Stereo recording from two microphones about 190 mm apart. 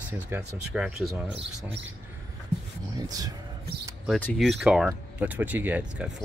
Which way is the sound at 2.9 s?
20° right (ahead or behind).